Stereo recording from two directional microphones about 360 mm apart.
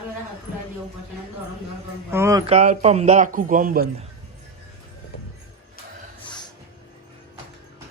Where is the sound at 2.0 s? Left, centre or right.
Centre; by 3.8 s right.